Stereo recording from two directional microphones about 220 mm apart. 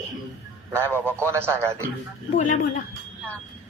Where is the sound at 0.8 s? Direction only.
10° left (ahead or behind).